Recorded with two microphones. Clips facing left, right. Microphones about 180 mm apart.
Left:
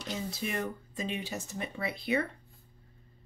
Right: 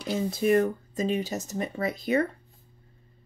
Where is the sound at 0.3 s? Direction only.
50° right (ahead or behind).